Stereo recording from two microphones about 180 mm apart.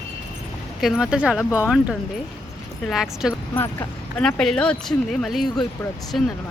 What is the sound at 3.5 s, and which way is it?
Speech, 10° left (ahead or behind).